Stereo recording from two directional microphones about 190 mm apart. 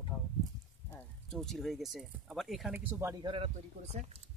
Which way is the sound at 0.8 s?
10° left (ahead or behind).